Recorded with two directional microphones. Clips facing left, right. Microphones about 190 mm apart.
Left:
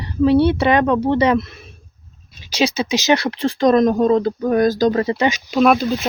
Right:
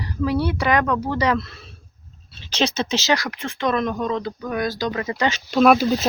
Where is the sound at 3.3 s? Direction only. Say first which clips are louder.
Left 9 dB; 35° left (ahead or behind).